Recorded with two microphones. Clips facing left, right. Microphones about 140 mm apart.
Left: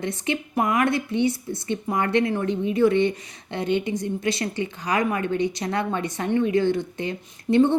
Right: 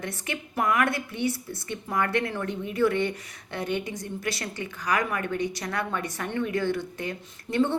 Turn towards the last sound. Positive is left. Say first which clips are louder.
# left 7 dB
turn(degrees=20)  # may be behind; listen again after turning